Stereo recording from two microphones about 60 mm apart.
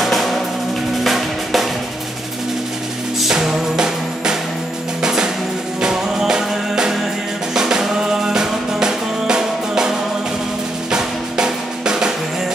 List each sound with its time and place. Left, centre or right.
0.0 s drum: centre
3.2 s music: centre
10.9 s drum: centre